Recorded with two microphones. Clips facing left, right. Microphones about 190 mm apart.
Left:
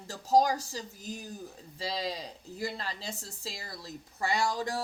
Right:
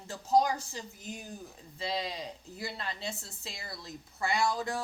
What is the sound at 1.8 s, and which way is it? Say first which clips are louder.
A woman's voice: even; 35° left (ahead or behind).